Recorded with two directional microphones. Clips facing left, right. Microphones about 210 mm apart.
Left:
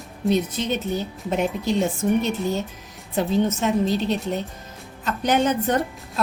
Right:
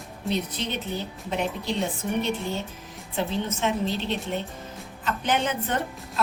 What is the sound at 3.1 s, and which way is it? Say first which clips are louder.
A woman's voice: left 7 dB; 40° left (ahead or behind).